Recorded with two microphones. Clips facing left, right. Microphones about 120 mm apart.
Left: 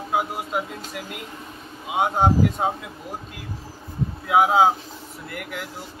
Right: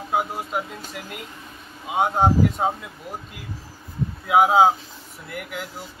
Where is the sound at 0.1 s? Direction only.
5° left (ahead or behind).